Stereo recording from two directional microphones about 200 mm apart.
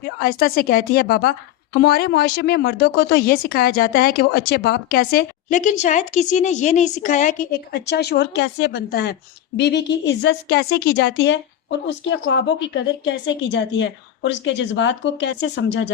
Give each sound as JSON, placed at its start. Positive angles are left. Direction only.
{"t": 0.0, "sound": "a woman's voice", "side_deg": 50}
{"t": 7.7, "sound": "a woman's voice", "side_deg": 55}